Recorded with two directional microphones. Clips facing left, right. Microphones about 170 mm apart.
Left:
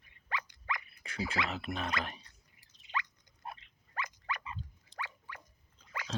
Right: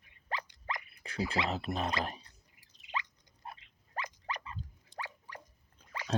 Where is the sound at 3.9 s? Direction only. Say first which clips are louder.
Even; 35° right (ahead or behind).